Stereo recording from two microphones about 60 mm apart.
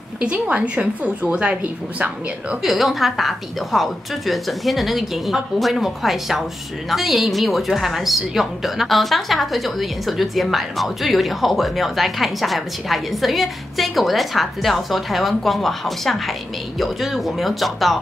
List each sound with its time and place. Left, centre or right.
0.2 s a woman's voice: right
2.6 s a woman's voice: centre